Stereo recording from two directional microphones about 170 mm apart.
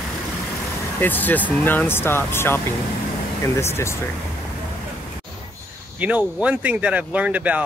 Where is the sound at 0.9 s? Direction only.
10° left (ahead or behind).